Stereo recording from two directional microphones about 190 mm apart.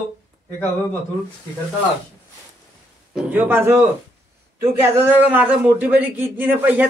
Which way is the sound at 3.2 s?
10° right (ahead or behind).